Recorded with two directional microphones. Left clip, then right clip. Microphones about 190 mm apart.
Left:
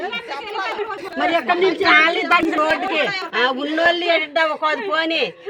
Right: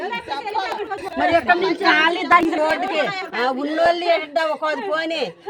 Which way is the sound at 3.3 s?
10° left (ahead or behind).